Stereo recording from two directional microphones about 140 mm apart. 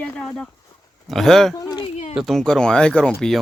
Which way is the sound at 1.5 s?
30° left (ahead or behind).